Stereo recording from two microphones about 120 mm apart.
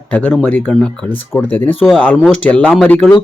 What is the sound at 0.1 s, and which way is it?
Speech, 15° left (ahead or behind).